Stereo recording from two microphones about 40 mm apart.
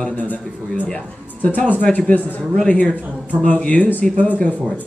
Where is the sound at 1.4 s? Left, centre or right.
Left.